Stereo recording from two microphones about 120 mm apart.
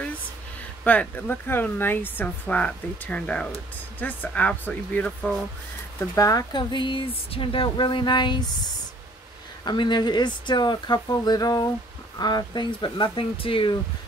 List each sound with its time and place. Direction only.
0.8 s speech: 10° left (ahead or behind)
5.9 s speech: 25° left (ahead or behind); by 13.7 s 45° left (ahead or behind)